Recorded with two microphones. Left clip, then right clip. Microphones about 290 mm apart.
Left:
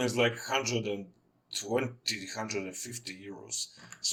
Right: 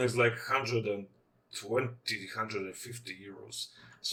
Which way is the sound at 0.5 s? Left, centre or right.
Left.